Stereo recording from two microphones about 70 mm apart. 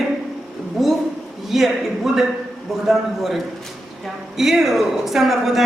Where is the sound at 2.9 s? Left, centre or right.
Centre.